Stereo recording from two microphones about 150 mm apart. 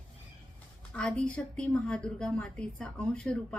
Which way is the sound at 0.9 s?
5° left (ahead or behind).